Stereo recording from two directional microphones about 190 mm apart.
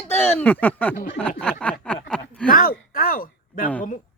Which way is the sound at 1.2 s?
5° left (ahead or behind).